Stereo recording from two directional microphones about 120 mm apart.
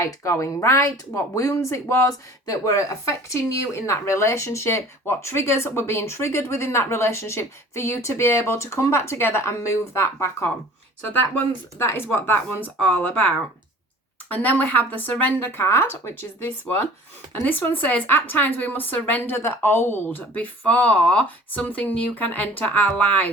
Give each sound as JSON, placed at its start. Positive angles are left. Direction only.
{"t": 0.0, "sound": "a woman's voice", "side_deg": 25}